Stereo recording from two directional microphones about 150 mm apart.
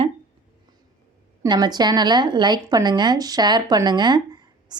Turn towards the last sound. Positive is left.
turn(degrees=-30)  # may be behind; listen again after turning